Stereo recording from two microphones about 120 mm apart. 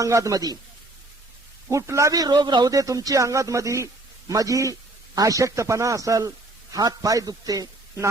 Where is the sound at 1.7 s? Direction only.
25° right (ahead or behind).